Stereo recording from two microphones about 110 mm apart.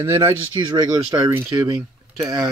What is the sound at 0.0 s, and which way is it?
Speech, 25° right (ahead or behind).